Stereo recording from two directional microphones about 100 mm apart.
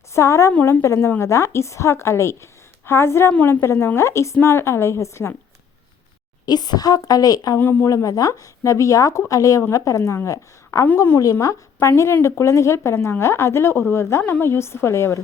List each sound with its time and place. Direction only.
0.1 s a woman's voice: 30° left (ahead or behind)
6.4 s a woman's voice: 45° left (ahead or behind)
7.6 s a woman's voice: 25° left (ahead or behind)
7.9 s a woman's voice: 35° left (ahead or behind)